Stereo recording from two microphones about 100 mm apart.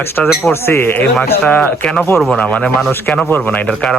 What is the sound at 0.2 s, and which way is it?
Speech, 15° left (ahead or behind).